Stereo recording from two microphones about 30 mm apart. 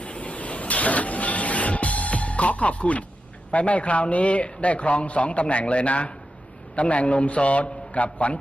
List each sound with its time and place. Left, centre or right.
0.0 s printer: left
3.5 s a man's voice: left